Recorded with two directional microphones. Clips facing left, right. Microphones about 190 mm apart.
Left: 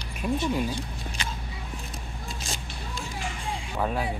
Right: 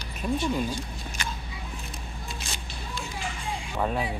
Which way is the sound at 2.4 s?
45° left (ahead or behind).